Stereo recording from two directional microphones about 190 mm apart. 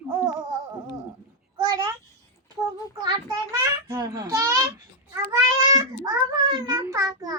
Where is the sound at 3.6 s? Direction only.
15° right (ahead or behind).